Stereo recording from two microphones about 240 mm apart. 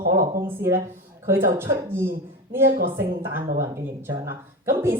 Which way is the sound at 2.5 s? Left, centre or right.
Centre.